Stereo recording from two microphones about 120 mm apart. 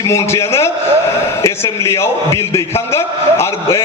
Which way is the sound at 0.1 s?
25° left (ahead or behind).